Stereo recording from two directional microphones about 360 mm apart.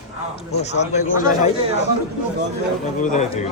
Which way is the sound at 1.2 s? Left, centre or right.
Centre.